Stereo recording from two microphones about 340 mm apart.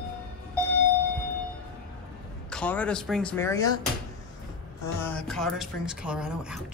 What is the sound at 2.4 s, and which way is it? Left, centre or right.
Speech, centre.